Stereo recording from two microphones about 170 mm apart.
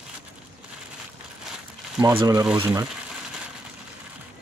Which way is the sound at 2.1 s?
25° right (ahead or behind).